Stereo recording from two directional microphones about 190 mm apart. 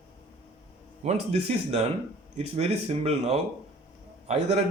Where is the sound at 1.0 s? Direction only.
35° right (ahead or behind).